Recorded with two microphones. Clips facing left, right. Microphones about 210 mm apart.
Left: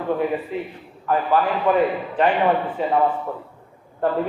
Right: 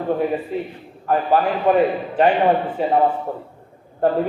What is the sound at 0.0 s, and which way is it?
A man's voice, 35° right (ahead or behind).